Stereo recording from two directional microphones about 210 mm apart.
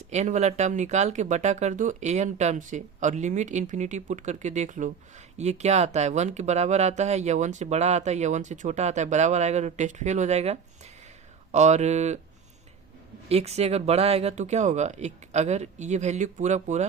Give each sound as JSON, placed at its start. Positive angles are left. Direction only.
{"t": 0.1, "sound": "speech", "side_deg": -35}
{"t": 13.2, "sound": "speech", "side_deg": -30}